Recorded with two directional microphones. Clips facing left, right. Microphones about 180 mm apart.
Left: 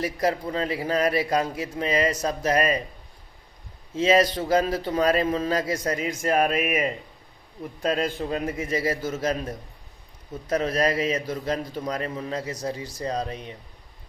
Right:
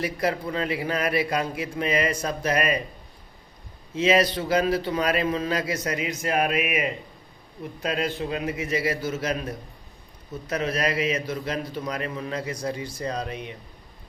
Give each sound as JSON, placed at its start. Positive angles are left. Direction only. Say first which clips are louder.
{"t": 0.0, "sound": "a man's voice", "louder": "left 1 dB", "side_deg": 40}
{"t": 3.9, "sound": "speech", "louder": "left 1 dB", "side_deg": 45}
{"t": 4.9, "sound": "a man's voice", "louder": "left 3 dB", "side_deg": 30}
{"t": 5.1, "sound": "a man's voice", "louder": "left 1 dB", "side_deg": 45}
{"t": 9.3, "sound": "a man's voice", "louder": "even", "side_deg": 25}
{"t": 10.5, "sound": "a man's voice", "louder": "left 3 dB", "side_deg": 40}